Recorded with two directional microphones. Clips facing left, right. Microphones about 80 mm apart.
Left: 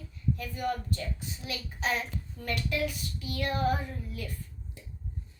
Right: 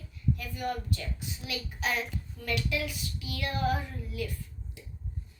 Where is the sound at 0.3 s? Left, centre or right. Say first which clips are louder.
Left 2 dB; left.